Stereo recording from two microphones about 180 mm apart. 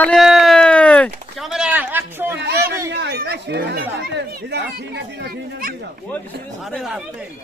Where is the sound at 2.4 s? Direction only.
65° right (ahead or behind).